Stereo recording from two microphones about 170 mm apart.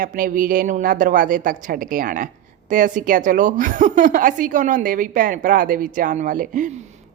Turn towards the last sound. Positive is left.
turn(degrees=-50)  # may be behind; listen again after turning